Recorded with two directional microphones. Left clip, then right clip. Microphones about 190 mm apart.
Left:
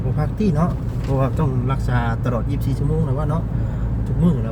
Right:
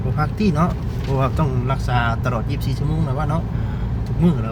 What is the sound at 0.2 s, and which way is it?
Speech, 20° right (ahead or behind).